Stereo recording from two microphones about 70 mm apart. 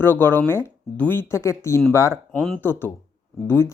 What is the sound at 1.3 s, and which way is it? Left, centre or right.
Speech, left.